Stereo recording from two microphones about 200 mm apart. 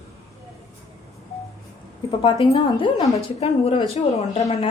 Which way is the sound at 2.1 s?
25° left (ahead or behind).